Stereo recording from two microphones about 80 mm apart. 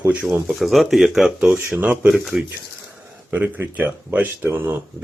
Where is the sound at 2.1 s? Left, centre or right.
Centre.